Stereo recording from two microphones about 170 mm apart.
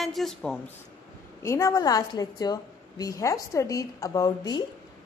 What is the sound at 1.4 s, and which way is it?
A woman's voice, 15° left (ahead or behind).